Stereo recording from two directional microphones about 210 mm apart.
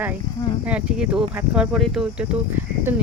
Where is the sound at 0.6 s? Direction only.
5° right (ahead or behind).